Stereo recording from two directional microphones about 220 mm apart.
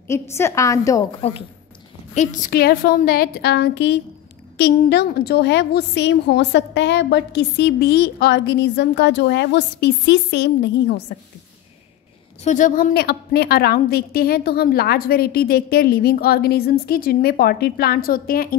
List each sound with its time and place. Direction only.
0.1 s a woman's voice: 10° left (ahead or behind)
2.1 s a woman's voice: 35° left (ahead or behind); by 11.1 s 50° left (ahead or behind)
12.4 s a woman's voice: 35° left (ahead or behind)